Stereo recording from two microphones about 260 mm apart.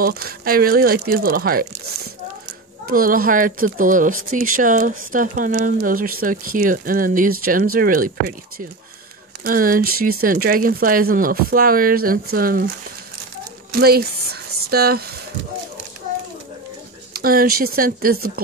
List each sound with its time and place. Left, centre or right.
0.0 s speech: right
2.9 s speech: right
13.7 s speech: right
17.1 s speech: right